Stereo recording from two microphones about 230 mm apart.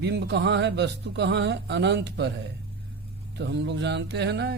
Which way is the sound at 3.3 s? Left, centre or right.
Right.